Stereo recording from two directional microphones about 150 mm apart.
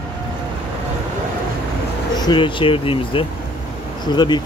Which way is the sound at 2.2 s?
30° left (ahead or behind).